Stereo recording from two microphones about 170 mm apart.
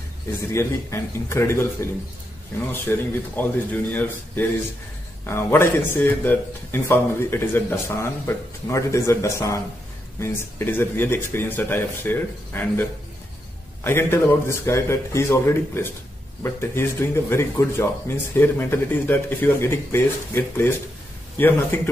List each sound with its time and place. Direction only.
0.4 s a man's voice: 15° left (ahead or behind)
2.9 s a man's voice: 15° left (ahead or behind)
13.8 s a man's voice: 15° left (ahead or behind)